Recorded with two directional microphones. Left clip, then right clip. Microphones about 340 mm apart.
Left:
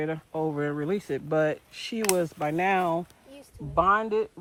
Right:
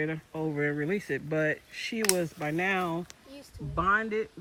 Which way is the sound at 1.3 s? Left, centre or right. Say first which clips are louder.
Left 4 dB; left.